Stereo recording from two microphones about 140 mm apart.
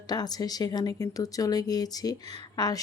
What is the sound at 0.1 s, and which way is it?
Speech, 30° left (ahead or behind).